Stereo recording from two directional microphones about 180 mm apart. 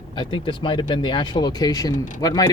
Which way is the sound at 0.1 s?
25° left (ahead or behind).